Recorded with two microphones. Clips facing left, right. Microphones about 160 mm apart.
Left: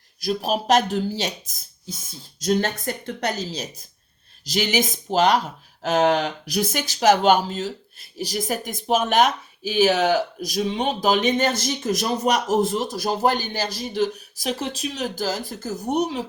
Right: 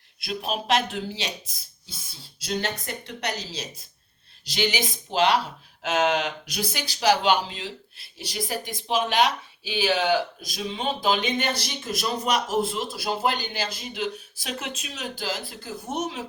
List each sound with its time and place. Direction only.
0.2 s speech: 40° left (ahead or behind)